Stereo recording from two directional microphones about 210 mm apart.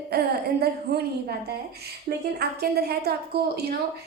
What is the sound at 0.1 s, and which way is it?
A woman's voice, 50° right (ahead or behind).